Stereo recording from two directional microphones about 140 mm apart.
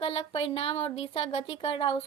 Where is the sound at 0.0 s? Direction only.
40° left (ahead or behind).